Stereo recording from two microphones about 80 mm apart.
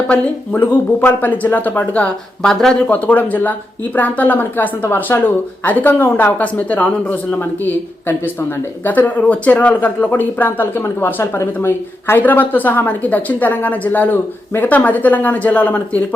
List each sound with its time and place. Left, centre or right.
0.5 s speech: left; by 2.7 s centre
2.8 s speech: left